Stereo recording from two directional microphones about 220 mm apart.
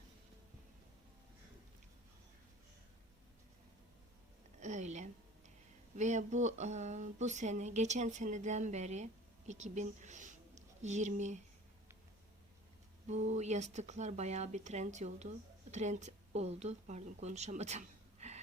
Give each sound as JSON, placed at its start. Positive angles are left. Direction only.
{"t": 4.6, "sound": "a sound", "side_deg": -35}
{"t": 6.0, "sound": "a woman's voice", "side_deg": -35}
{"t": 13.1, "sound": "speech", "side_deg": -30}